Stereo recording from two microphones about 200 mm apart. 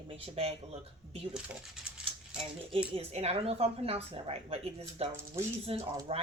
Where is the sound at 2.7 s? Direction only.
30° right (ahead or behind).